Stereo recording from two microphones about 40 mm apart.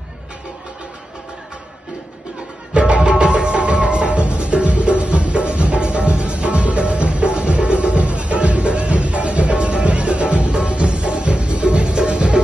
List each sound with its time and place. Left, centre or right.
2.7 s music: right